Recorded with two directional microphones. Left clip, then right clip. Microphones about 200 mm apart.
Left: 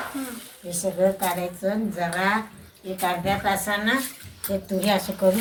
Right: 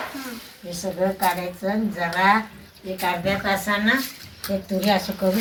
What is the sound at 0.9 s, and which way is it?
Speech, centre (ahead or behind).